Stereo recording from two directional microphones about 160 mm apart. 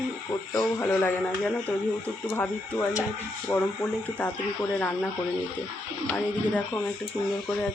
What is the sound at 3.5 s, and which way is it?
Speech, 25° left (ahead or behind).